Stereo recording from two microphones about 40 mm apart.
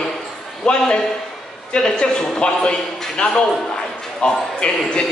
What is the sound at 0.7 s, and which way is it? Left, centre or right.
A man's voice, left.